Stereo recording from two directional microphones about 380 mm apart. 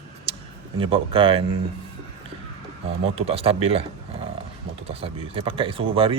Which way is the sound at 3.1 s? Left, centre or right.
Centre.